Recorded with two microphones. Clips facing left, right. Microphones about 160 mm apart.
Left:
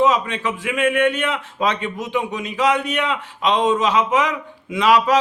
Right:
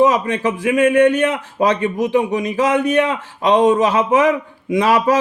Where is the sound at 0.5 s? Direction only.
40° right (ahead or behind).